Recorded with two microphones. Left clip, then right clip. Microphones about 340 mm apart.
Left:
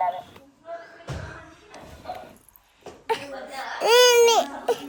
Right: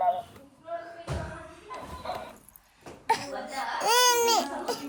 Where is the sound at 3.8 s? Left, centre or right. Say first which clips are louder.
Left 7 dB; centre.